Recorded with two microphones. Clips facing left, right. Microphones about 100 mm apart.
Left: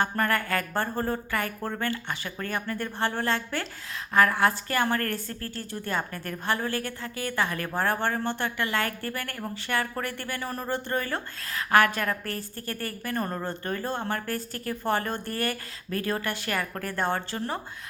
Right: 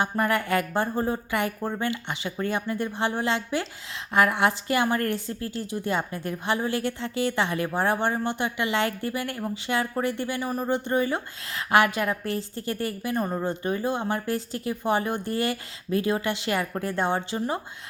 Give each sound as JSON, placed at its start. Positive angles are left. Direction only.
{"t": 0.0, "sound": "speech", "side_deg": -15}